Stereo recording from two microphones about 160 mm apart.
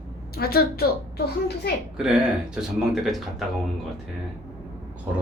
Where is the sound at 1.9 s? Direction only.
5° right (ahead or behind).